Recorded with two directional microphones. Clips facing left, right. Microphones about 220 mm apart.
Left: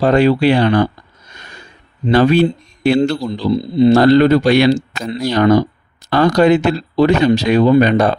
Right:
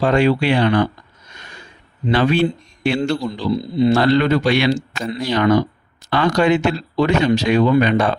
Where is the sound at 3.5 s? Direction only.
25° left (ahead or behind).